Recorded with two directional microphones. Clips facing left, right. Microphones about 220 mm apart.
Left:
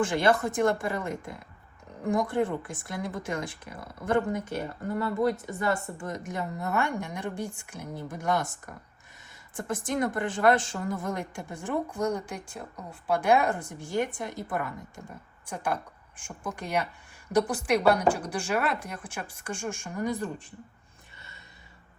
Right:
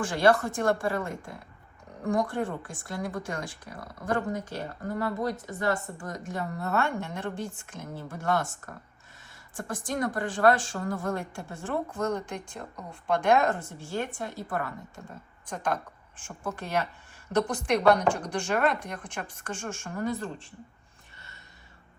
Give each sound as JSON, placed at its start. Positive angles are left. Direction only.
{"t": 0.0, "sound": "a woman's voice", "side_deg": 20}